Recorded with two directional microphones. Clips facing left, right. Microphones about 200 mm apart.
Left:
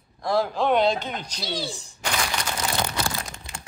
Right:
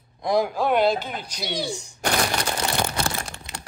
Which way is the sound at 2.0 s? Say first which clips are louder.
Right 4 dB; 50° right (ahead or behind).